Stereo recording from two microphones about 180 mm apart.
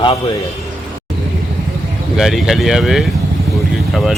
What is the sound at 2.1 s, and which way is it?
Speech, centre (ahead or behind).